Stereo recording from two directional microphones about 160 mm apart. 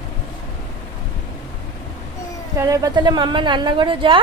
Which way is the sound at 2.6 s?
20° right (ahead or behind).